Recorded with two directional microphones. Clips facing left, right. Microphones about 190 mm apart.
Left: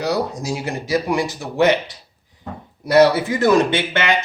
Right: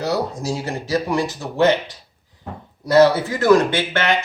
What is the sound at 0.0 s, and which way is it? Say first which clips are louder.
Speech: left 1 dB; 15° left (ahead or behind).